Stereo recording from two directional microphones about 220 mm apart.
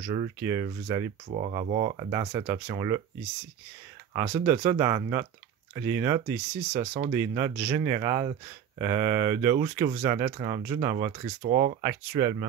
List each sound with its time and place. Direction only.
0.4 s speech: 15° right (ahead or behind)
1.3 s speech: 30° right (ahead or behind)
2.0 s speech: 15° right (ahead or behind)
4.1 s speech: 15° right (ahead or behind)
6.8 s speech: 30° right (ahead or behind)
7.1 s speech: 10° right (ahead or behind)
11.4 s speech: 30° right (ahead or behind)
11.8 s speech: 15° right (ahead or behind)